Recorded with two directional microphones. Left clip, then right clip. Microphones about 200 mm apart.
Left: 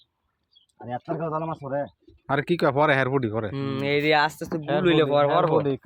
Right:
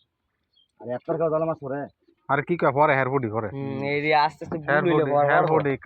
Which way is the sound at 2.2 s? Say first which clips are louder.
Right 1 dB; 25° left (ahead or behind).